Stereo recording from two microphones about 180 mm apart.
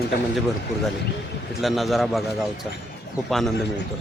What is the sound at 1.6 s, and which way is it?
Speech, centre (ahead or behind).